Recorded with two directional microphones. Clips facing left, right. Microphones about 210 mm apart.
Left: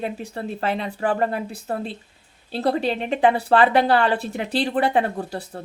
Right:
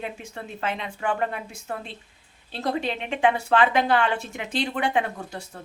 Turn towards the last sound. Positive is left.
turn(degrees=35)  # may be behind; listen again after turning